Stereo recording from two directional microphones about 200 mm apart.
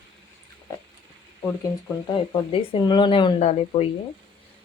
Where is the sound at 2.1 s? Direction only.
25° left (ahead or behind).